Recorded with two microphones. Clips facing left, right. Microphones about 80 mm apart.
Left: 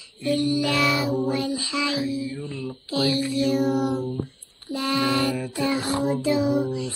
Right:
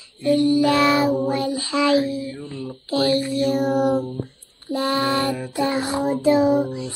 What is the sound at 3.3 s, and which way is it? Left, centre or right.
Mantra, right.